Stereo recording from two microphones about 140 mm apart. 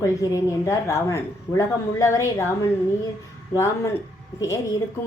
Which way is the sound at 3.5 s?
20° left (ahead or behind).